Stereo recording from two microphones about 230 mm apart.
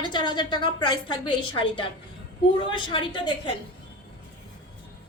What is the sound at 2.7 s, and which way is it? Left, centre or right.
Speech, centre.